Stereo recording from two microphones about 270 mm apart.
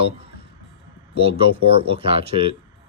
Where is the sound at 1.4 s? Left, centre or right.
Right.